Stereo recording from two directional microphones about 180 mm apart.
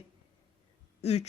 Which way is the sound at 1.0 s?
35° left (ahead or behind).